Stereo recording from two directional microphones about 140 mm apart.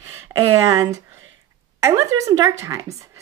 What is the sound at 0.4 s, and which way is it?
A woman's voice, 20° right (ahead or behind).